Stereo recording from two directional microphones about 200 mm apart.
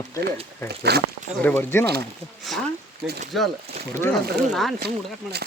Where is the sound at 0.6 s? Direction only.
55° right (ahead or behind).